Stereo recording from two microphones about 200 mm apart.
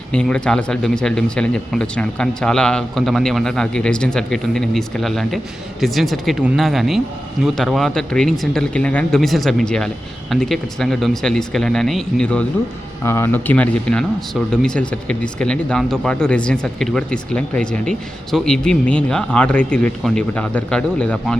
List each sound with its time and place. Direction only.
0.1 s speech: 5° left (ahead or behind)